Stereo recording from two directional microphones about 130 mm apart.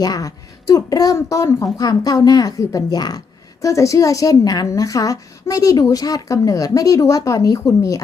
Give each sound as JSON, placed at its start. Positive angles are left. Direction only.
{"t": 0.0, "sound": "a woman's voice", "side_deg": 30}